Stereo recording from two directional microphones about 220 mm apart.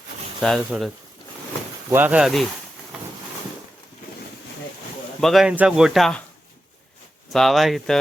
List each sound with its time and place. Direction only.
0.3 s speech: centre (ahead or behind)
1.9 s speech: 10° right (ahead or behind)
5.2 s speech: centre (ahead or behind)
7.3 s speech: centre (ahead or behind)